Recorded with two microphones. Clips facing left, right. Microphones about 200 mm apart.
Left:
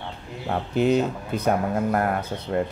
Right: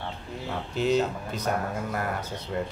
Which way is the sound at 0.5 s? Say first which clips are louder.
Left 5 dB; 55° left (ahead or behind).